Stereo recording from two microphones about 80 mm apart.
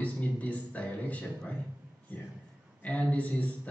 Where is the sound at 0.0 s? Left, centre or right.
Centre.